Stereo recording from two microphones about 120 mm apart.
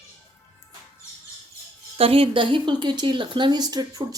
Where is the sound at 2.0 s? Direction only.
50° right (ahead or behind); by 4.0 s 35° right (ahead or behind).